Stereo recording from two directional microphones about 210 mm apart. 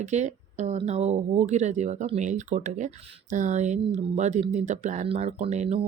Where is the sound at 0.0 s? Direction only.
35° right (ahead or behind).